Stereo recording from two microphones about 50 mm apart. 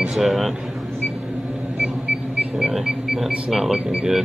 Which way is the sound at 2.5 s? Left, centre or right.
Centre.